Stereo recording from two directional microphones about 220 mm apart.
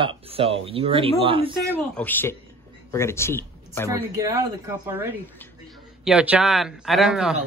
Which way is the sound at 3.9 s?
15° right (ahead or behind).